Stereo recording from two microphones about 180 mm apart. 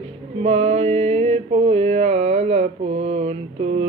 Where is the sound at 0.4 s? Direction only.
40° right (ahead or behind).